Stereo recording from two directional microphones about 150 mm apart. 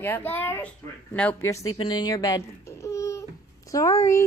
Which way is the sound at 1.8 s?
30° left (ahead or behind).